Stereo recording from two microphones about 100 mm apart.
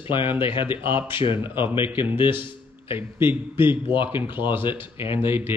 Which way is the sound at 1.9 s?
20° right (ahead or behind).